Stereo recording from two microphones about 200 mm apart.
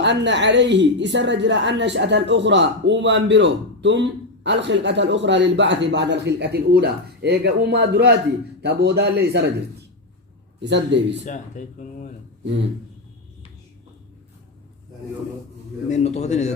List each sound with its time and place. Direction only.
0.0 s a woman's voice: 60° right (ahead or behind)
10.6 s a woman's voice: 60° right (ahead or behind)
11.3 s speech: 40° left (ahead or behind)
15.9 s speech: 35° left (ahead or behind)